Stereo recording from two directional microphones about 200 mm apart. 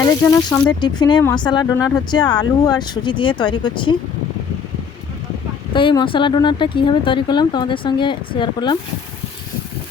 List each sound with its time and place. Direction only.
0.0 s speech: 15° left (ahead or behind)
5.7 s speech: 25° left (ahead or behind)